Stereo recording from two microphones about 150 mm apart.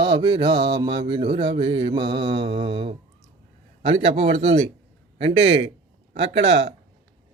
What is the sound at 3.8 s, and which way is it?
A man's voice, 45° right (ahead or behind).